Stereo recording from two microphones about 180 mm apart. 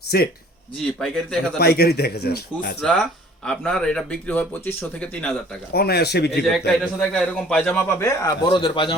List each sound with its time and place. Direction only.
0.1 s a man's voice: 60° left (ahead or behind)
0.9 s speech: 5° left (ahead or behind)
1.5 s a man's voice: 60° left (ahead or behind)
2.8 s speech: 5° left (ahead or behind)
5.7 s a man's voice: 60° left (ahead or behind)
7.0 s a man's voice: 5° left (ahead or behind); by 8.4 s 20° left (ahead or behind)
8.4 s a man's voice: 30° left (ahead or behind)